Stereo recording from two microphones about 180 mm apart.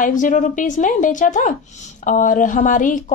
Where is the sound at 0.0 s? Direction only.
45° left (ahead or behind).